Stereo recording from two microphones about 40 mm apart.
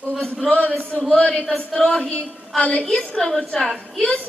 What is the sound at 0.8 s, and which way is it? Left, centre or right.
A woman's voice, left.